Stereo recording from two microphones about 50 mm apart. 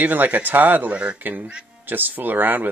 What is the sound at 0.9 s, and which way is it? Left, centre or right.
Speech, right.